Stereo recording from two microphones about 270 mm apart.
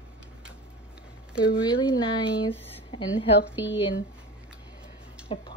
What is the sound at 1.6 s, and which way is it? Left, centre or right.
Speech, centre.